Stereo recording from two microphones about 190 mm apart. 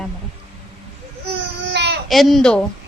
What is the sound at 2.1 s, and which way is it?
Speech, centre (ahead or behind).